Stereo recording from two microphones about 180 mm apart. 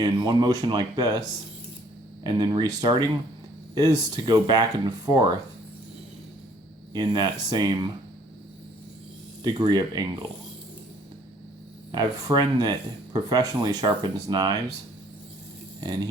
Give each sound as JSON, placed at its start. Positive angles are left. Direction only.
{"t": 0.0, "sound": "speech", "side_deg": -20}
{"t": 6.9, "sound": "speech", "side_deg": -25}
{"t": 9.4, "sound": "speech", "side_deg": -25}
{"t": 11.9, "sound": "speech", "side_deg": -25}